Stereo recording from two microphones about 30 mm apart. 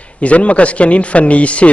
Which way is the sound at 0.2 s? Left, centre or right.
Left.